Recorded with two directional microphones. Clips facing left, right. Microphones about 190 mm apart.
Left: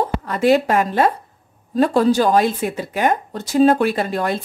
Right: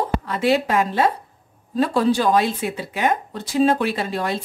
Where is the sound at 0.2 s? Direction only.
45° left (ahead or behind).